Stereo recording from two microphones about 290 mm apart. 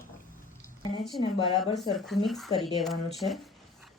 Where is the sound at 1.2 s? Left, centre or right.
Centre.